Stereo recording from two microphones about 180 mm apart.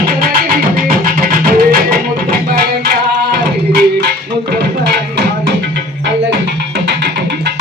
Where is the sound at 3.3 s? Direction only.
65° right (ahead or behind).